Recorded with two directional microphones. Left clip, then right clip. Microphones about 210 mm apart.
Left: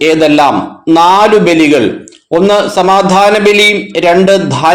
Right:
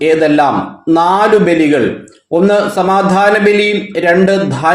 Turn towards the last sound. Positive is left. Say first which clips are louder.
# left 4 dB
turn(degrees=20)  # may be behind; listen again after turning